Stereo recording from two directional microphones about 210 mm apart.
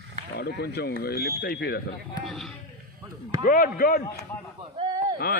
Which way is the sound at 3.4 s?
40° left (ahead or behind).